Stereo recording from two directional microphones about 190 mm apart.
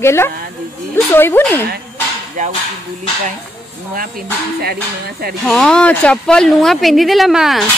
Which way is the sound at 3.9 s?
50° right (ahead or behind).